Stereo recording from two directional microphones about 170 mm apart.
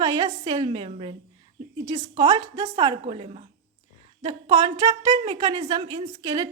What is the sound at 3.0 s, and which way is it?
Speech, 35° right (ahead or behind).